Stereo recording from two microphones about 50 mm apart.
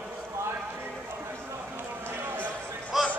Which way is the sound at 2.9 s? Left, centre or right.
Centre.